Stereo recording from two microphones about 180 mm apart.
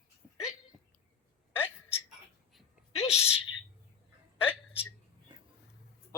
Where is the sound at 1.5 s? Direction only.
10° left (ahead or behind).